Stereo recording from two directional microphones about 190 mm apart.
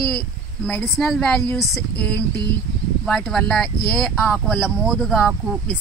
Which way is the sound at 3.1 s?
Centre (ahead or behind).